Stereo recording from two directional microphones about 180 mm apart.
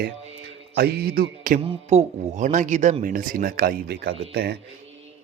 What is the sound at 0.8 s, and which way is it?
Speech, 60° right (ahead or behind).